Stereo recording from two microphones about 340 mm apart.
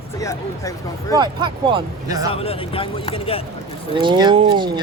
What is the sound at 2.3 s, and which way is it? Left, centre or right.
Speech, centre.